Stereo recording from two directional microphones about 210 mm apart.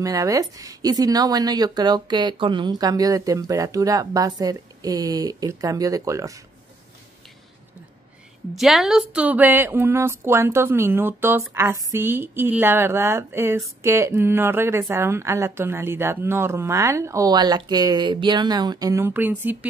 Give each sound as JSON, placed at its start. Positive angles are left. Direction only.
{"t": 0.0, "sound": "a woman's voice", "side_deg": -15}
{"t": 8.5, "sound": "a woman's voice", "side_deg": 0}